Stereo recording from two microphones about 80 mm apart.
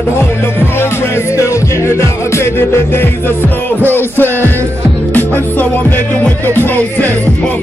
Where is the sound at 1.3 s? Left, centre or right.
Left.